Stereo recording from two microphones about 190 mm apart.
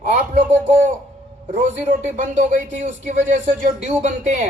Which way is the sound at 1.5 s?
40° right (ahead or behind).